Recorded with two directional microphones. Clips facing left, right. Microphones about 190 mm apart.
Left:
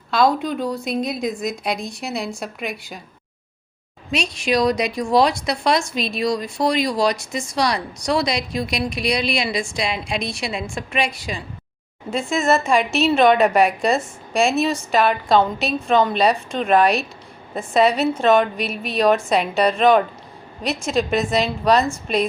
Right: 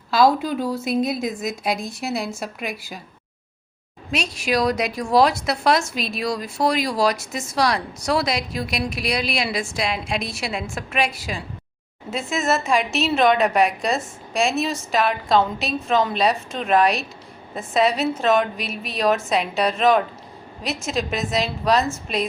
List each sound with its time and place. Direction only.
0.1 s a woman's voice: 5° right (ahead or behind)
4.1 s a woman's voice: 5° right (ahead or behind)